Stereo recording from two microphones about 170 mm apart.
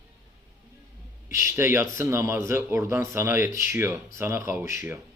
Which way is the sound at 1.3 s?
15° right (ahead or behind).